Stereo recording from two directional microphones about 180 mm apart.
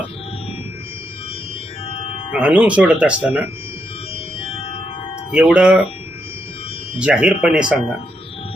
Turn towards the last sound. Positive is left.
turn(degrees=-5)  # may be behind; listen again after turning